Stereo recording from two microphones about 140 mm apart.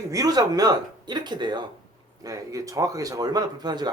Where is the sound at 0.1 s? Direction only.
25° right (ahead or behind).